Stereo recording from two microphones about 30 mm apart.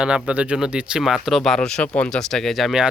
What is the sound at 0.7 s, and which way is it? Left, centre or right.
Speech, right.